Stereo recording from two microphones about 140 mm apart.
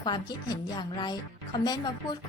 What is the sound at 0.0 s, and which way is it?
A woman's voice, 30° left (ahead or behind).